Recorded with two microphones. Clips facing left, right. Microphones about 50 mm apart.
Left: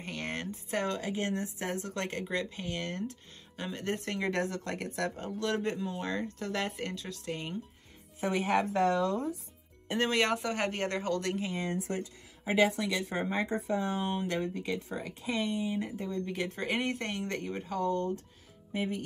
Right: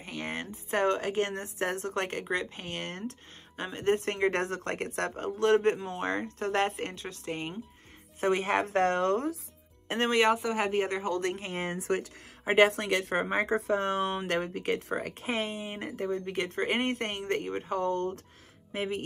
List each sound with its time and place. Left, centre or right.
0.0 s a sound: centre
0.7 s a woman's voice: right
8.2 s a woman's voice: right
10.1 s speech: centre
11.5 s speech: right
12.4 s speech: right
15.7 s a woman's voice: right
16.6 s a woman's voice: right
18.7 s speech: right